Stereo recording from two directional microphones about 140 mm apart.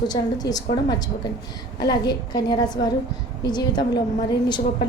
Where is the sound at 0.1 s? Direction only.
30° left (ahead or behind).